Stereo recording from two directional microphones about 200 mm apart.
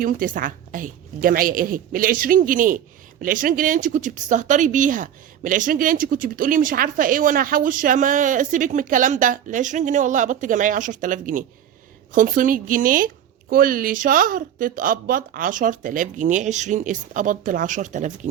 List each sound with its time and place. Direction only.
0.0 s a woman's voice: 45° right (ahead or behind)